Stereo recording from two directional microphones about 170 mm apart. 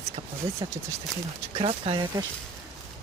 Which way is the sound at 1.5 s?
30° right (ahead or behind).